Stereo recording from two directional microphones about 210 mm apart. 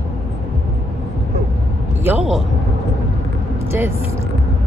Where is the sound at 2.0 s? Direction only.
Centre (ahead or behind).